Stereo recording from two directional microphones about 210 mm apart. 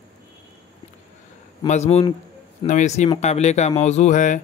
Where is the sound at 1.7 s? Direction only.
30° left (ahead or behind).